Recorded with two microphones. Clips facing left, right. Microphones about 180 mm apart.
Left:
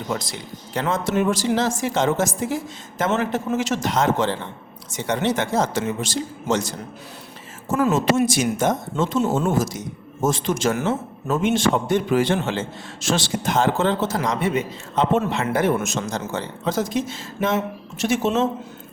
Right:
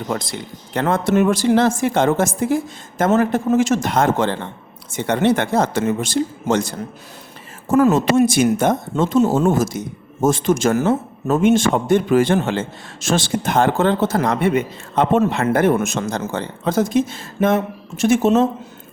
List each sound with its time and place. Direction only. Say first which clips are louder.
0.1 s a woman's voice: right 2 dB; 55° right (ahead or behind)